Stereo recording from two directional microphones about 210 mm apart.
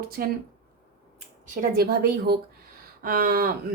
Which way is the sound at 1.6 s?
45° right (ahead or behind).